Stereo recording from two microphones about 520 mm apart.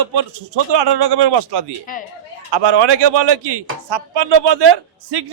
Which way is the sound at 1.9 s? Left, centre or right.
Centre.